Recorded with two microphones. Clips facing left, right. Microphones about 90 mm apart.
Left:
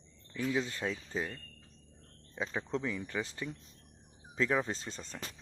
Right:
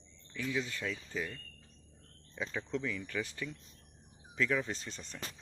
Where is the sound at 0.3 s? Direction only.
35° left (ahead or behind).